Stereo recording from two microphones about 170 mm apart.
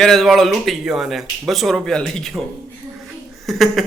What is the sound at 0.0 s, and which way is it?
A man's voice, centre (ahead or behind).